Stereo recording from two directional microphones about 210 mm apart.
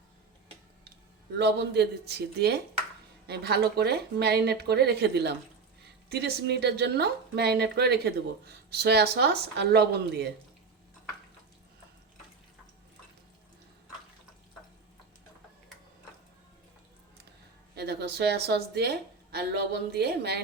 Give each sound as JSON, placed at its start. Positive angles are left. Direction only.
{"t": 1.4, "sound": "a woman's voice", "side_deg": -50}
{"t": 17.7, "sound": "a woman's voice", "side_deg": -50}